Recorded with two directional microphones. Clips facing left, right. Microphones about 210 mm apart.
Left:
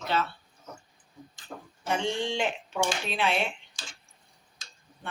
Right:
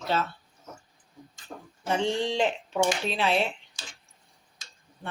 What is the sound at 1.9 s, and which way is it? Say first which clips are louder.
Speech: right 3 dB; 35° right (ahead or behind).